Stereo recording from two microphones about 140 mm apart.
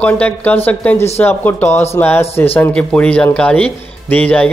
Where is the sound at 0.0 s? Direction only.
10° left (ahead or behind).